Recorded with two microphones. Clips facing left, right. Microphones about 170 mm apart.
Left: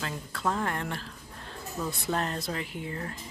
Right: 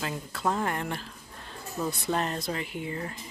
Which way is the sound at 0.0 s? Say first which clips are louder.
Right 2 dB; 5° right (ahead or behind).